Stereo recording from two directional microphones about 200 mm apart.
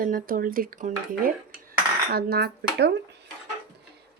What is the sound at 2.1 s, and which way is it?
Speech, 50° right (ahead or behind).